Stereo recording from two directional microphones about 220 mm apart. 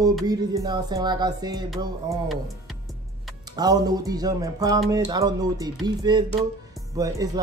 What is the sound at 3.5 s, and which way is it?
Speech, 15° right (ahead or behind).